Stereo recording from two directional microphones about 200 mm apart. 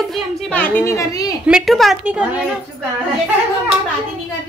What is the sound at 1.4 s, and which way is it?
Speech, centre (ahead or behind).